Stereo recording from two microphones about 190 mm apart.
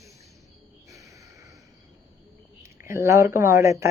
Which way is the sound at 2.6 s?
15° right (ahead or behind).